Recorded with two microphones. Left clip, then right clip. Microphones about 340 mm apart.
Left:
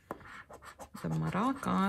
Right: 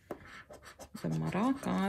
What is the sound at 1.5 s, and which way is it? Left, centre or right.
Speech, centre.